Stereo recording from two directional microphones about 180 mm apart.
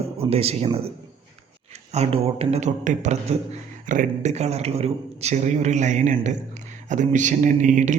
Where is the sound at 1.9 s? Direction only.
35° right (ahead or behind).